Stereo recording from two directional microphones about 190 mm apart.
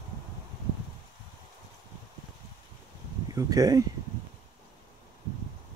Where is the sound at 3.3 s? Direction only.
20° right (ahead or behind).